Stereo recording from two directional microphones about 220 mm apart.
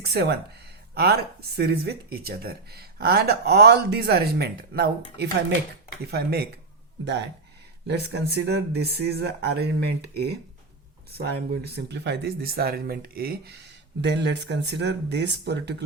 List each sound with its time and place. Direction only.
0.0 s speech: 50° right (ahead or behind)